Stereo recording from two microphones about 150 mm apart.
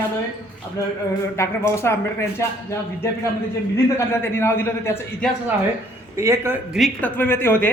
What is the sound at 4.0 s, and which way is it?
A man's voice, 15° left (ahead or behind).